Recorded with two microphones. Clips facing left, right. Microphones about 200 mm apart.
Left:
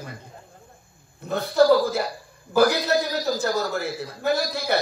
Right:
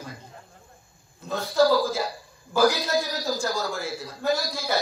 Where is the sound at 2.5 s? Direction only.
60° left (ahead or behind).